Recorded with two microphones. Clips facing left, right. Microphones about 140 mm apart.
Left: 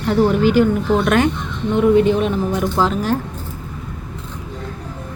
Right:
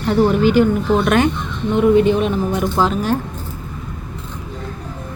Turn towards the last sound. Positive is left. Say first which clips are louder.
# right 1 dB
turn(degrees=-20)  # may be behind; listen again after turning